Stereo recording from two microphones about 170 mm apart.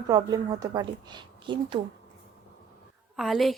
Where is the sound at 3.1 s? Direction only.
Centre (ahead or behind).